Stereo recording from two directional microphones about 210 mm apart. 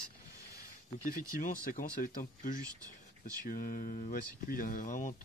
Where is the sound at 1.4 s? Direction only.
40° left (ahead or behind).